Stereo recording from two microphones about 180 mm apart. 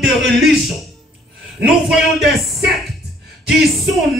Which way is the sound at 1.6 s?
Centre (ahead or behind).